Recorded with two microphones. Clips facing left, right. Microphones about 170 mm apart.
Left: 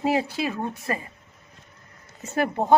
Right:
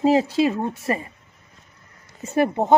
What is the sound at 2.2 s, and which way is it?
Speech, 25° right (ahead or behind).